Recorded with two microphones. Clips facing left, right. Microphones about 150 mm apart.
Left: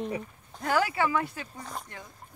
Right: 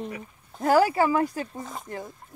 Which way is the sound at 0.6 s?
40° right (ahead or behind).